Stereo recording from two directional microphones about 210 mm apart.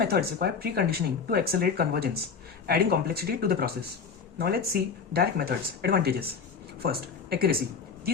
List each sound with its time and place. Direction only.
0.0 s a woman's voice: 50° right (ahead or behind)